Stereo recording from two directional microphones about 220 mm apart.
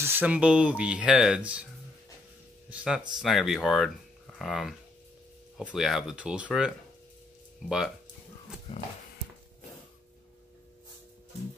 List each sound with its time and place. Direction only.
0.0 s speech: 10° right (ahead or behind)
2.7 s speech: 5° right (ahead or behind)
8.7 s a sound: 20° left (ahead or behind)